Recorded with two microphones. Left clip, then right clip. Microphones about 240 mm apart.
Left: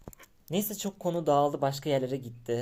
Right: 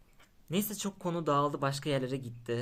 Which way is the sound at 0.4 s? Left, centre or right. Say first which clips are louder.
Left 3 dB; centre.